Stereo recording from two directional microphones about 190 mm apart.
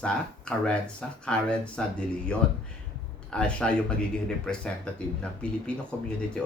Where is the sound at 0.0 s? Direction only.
5° left (ahead or behind).